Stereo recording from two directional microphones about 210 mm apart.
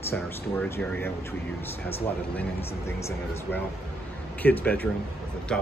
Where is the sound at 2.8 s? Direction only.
10° left (ahead or behind).